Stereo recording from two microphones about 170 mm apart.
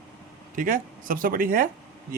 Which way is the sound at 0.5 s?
55° right (ahead or behind).